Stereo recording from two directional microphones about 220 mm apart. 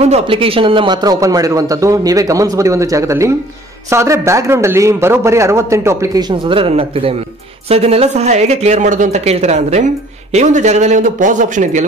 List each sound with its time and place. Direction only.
0.0 s speech: 25° right (ahead or behind)